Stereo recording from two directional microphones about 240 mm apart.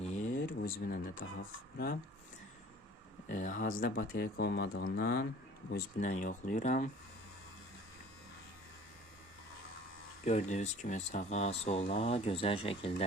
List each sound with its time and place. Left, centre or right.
0.0 s a sound: left
3.2 s speech: left
10.2 s speech: left